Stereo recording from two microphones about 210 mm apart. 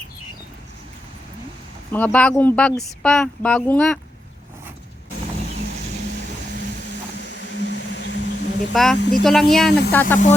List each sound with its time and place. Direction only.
1.9 s speech: 10° left (ahead or behind)
7.4 s vehicle: 55° left (ahead or behind)
8.7 s speech: centre (ahead or behind)
9.0 s speech: 55° left (ahead or behind)
9.2 s speech: centre (ahead or behind)
9.6 s speech: 50° left (ahead or behind)
9.9 s speech: 10° left (ahead or behind)